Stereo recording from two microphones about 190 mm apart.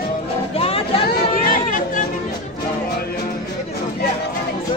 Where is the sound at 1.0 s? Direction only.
45° left (ahead or behind).